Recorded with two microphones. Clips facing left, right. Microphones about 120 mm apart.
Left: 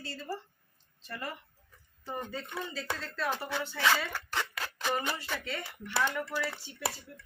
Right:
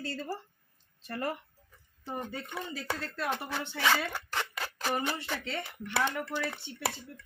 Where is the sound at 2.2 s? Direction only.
15° right (ahead or behind).